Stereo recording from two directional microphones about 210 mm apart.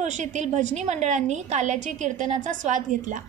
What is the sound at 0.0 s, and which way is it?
A woman's voice, 35° right (ahead or behind).